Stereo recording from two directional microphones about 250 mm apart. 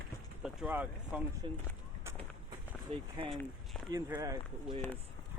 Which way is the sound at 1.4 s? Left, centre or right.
Centre.